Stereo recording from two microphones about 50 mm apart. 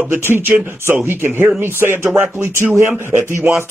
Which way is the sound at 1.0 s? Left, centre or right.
Right.